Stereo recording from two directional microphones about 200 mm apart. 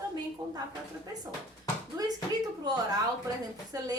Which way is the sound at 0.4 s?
20° right (ahead or behind).